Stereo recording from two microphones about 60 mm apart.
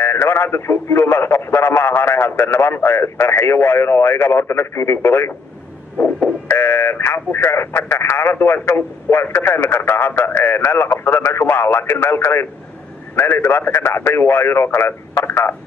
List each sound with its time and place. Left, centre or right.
0.0 s speech: left
6.4 s speech: left